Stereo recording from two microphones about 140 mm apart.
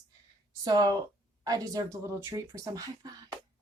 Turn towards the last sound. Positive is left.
turn(degrees=-25)  # may be behind; listen again after turning